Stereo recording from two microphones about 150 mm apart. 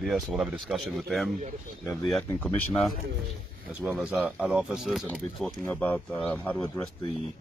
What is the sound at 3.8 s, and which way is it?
Speech, 10° right (ahead or behind).